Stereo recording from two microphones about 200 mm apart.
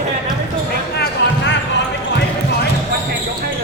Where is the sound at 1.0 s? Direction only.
60° left (ahead or behind).